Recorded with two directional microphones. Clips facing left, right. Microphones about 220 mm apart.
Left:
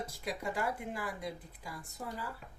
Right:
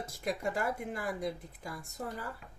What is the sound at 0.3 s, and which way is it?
Speech, 50° right (ahead or behind).